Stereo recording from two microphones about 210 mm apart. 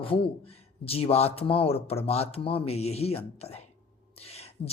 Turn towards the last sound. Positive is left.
turn(degrees=30)  # may be behind; listen again after turning